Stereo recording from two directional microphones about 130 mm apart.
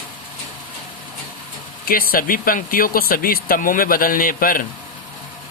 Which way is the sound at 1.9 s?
90° left.